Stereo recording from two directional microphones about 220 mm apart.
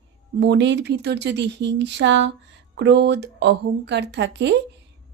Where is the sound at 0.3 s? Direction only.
50° right (ahead or behind).